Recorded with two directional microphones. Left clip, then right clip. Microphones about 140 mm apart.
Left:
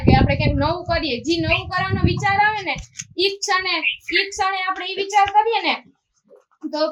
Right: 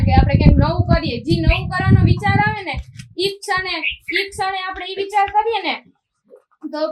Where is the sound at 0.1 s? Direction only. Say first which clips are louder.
Even; 20° left (ahead or behind).